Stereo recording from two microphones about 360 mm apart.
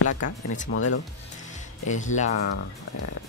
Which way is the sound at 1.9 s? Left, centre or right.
Centre.